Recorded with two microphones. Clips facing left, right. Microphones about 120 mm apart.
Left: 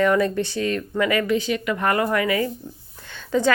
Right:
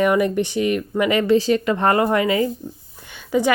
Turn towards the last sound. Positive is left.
turn(degrees=-10)  # may be behind; listen again after turning